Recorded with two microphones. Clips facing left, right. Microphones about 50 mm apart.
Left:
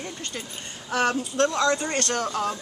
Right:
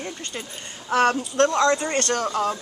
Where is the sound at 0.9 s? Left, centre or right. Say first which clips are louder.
Right 4 dB; right.